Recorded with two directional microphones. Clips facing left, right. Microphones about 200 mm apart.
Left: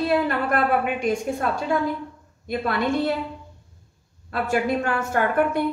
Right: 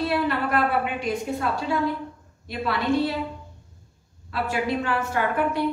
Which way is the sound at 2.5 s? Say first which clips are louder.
Left 1 dB; 50° left (ahead or behind).